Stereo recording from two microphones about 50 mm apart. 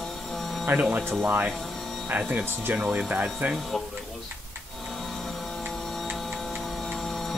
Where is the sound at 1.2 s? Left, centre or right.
Right.